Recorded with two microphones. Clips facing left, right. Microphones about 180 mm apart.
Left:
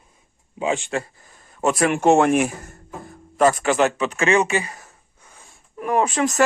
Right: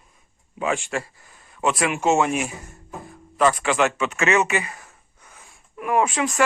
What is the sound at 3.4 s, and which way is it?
Speech, 45° left (ahead or behind).